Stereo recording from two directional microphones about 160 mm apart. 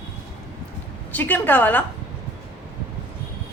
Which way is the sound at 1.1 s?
10° left (ahead or behind).